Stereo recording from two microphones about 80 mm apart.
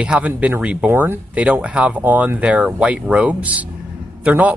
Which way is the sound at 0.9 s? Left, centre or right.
Right.